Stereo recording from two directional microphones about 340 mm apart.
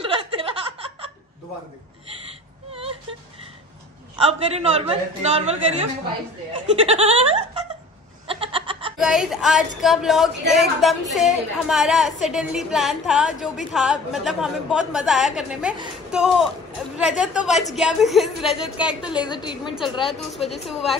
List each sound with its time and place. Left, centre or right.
0.0 s chuckle: centre
2.7 s whimper: centre
4.2 s a man's voice: centre
6.9 s a man's voice: centre
8.3 s a sound: centre
8.9 s a woman's voice: centre
19.2 s a woman's voice: centre
20.1 s a woman's voice: centre